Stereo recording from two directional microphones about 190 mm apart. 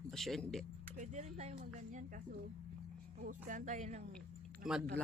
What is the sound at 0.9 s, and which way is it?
Speech, 40° right (ahead or behind).